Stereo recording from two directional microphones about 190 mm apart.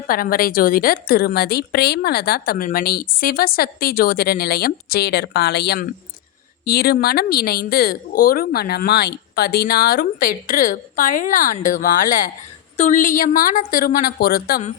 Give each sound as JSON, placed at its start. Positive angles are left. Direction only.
{"t": 0.1, "sound": "a woman's voice", "side_deg": 50}